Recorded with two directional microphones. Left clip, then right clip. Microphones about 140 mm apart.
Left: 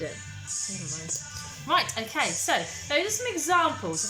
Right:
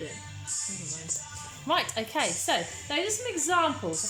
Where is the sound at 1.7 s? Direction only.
25° right (ahead or behind).